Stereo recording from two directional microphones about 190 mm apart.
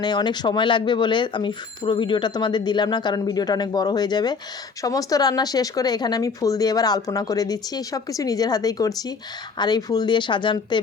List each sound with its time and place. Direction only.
0.0 s speech: 20° left (ahead or behind)